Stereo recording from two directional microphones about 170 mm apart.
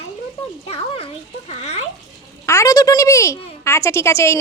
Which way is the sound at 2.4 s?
15° left (ahead or behind).